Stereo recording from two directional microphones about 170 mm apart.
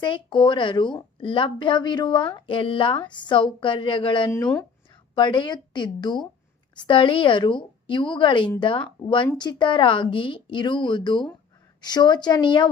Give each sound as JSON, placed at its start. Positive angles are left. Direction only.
{"t": 0.0, "sound": "speech", "side_deg": 30}